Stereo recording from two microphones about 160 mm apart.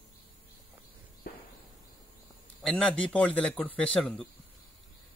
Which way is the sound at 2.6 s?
5° left (ahead or behind).